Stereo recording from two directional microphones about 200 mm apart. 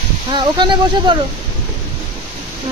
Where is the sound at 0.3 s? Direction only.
25° right (ahead or behind).